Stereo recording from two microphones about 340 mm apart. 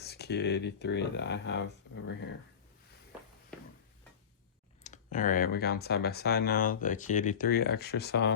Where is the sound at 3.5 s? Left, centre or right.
Centre.